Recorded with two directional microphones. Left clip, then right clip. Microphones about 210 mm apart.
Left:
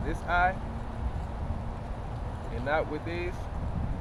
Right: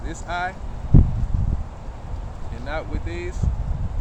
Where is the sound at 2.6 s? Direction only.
20° right (ahead or behind).